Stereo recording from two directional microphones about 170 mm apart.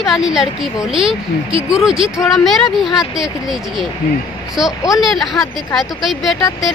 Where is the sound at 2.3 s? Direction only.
Centre (ahead or behind).